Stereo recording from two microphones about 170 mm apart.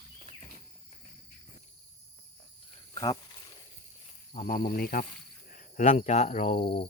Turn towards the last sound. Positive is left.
turn(degrees=30)  # may be behind; listen again after turning